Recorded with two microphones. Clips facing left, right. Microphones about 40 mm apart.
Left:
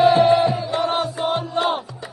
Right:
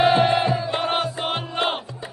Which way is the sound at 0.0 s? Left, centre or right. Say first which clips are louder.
Left 3 dB; right.